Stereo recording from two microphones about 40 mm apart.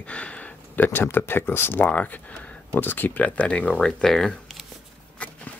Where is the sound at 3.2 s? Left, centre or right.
Left.